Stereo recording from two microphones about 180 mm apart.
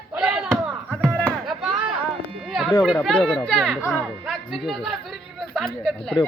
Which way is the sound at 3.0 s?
Centre (ahead or behind).